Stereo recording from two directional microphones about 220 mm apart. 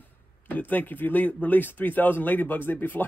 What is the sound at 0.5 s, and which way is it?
Speech, 10° left (ahead or behind).